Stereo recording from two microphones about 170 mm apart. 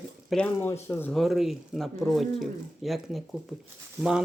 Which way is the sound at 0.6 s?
10° left (ahead or behind).